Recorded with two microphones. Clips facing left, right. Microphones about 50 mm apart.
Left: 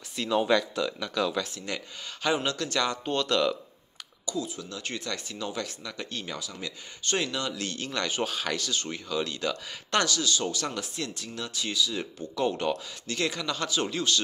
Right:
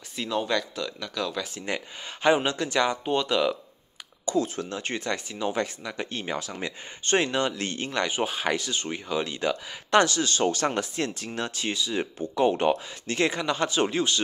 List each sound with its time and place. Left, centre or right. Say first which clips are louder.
0.3 s speech: left 3 dB; centre
2.2 s speech: right 5 dB; right
4.3 s speech: right 7 dB; right
4.7 s speech: right 4 dB; right
10.0 s speech: right 4 dB; right